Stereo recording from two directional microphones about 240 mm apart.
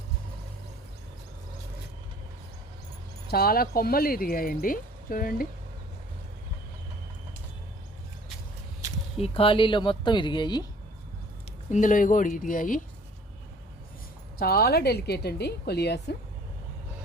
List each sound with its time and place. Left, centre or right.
3.2 s speech: left
9.1 s speech: left
11.7 s speech: left
14.3 s a woman's voice: left